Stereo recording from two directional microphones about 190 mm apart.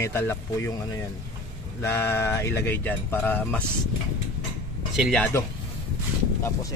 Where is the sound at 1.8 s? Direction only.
15° left (ahead or behind).